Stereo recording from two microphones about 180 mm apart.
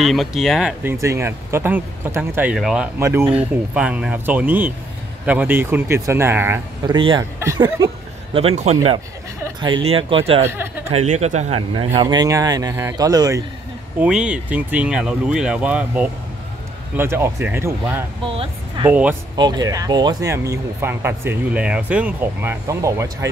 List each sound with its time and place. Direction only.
0.0 s speech: centre (ahead or behind)
1.0 s speech: 15° right (ahead or behind)
6.9 s speech: 25° right (ahead or behind)
7.3 s speech: 15° right (ahead or behind)
8.3 s speech: 35° right (ahead or behind)
10.4 s speech: 15° right (ahead or behind)
10.9 s speech: 35° right (ahead or behind)
11.7 s speech: 30° right (ahead or behind)
13.9 s speech: 5° right (ahead or behind)
18.2 s speech: 30° right (ahead or behind)
18.9 s speech: 10° right (ahead or behind)
19.3 s speech: 20° right (ahead or behind)